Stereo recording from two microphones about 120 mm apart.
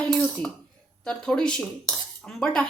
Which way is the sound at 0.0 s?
10° left (ahead or behind).